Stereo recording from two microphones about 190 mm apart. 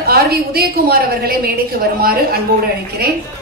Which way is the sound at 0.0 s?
55° right (ahead or behind).